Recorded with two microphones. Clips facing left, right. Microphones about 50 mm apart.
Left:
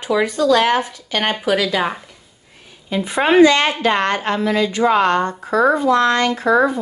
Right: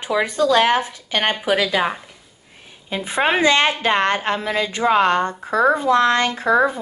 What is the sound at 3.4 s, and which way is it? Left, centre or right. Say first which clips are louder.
A woman's voice: left 4 dB; right.